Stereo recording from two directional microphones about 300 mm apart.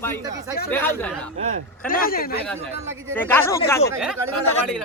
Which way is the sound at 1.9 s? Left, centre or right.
Left.